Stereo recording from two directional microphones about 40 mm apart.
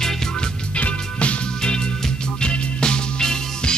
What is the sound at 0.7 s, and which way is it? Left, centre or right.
Music, left.